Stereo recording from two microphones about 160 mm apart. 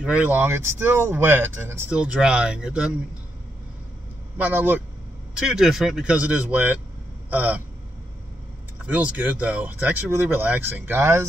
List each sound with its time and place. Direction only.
0.0 s speech: 10° right (ahead or behind)
4.4 s speech: 10° right (ahead or behind)
7.2 s a sound: 10° right (ahead or behind)
8.8 s speech: 10° right (ahead or behind)